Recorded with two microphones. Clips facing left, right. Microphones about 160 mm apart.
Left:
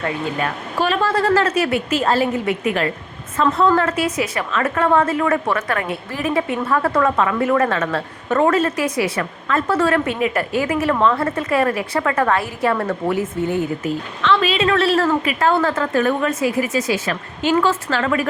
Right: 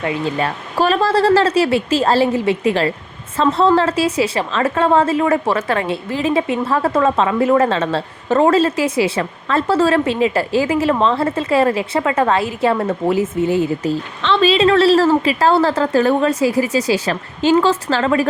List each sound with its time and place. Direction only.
0.3 s a woman's voice: 35° right (ahead or behind)